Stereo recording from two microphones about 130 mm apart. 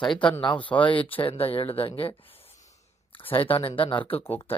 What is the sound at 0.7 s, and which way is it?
Speech, 40° left (ahead or behind).